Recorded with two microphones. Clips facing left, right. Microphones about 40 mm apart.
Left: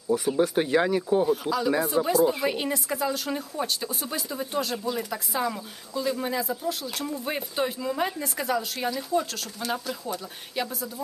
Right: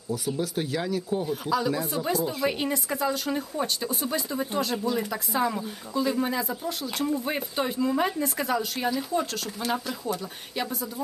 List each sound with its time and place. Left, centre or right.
0.1 s speech: left
1.3 s speech: centre